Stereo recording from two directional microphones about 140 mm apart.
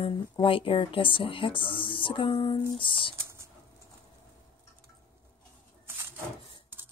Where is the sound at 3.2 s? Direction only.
20° right (ahead or behind).